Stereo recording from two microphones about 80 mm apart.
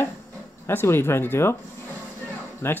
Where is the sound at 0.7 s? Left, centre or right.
Left.